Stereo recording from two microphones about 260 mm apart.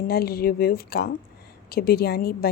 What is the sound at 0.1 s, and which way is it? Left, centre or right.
Speech, left.